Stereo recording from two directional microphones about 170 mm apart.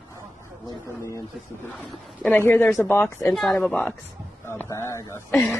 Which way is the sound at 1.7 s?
5° left (ahead or behind).